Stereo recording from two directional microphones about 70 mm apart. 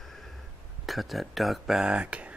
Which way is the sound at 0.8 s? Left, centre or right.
Centre.